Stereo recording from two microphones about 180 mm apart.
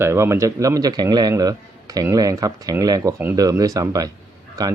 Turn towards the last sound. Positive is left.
turn(degrees=-20)  # may be behind; listen again after turning